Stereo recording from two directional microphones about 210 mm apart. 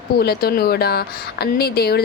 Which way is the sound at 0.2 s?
50° left (ahead or behind).